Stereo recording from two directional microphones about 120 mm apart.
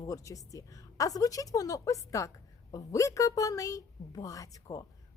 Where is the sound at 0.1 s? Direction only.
30° left (ahead or behind).